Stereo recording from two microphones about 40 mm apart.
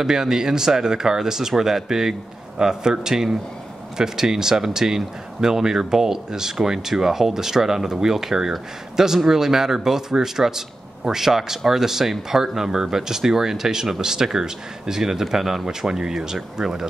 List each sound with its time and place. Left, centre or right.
0.0 s speech: centre